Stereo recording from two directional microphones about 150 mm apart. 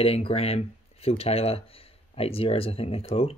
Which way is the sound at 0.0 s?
40° left (ahead or behind).